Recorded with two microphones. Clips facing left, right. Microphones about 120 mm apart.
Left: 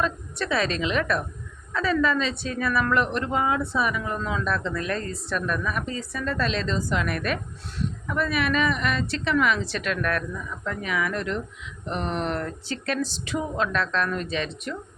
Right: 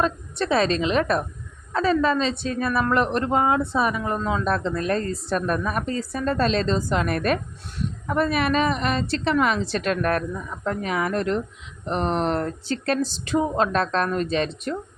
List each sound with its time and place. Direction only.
0.0 s a woman's voice: 30° right (ahead or behind)
13.0 s speech: centre (ahead or behind)
13.3 s a woman's voice: 35° right (ahead or behind)